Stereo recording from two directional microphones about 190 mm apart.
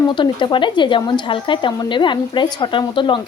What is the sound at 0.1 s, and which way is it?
Speech, 25° left (ahead or behind).